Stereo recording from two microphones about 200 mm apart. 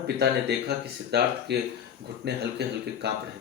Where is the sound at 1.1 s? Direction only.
55° right (ahead or behind).